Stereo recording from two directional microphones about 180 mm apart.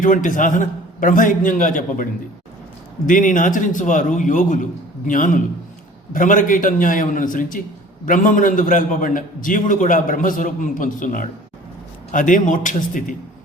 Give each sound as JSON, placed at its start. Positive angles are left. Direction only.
{"t": 0.0, "sound": "a man's voice", "side_deg": 45}
{"t": 3.1, "sound": "a man's voice", "side_deg": 45}